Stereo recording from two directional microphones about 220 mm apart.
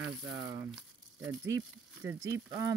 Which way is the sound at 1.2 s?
15° right (ahead or behind).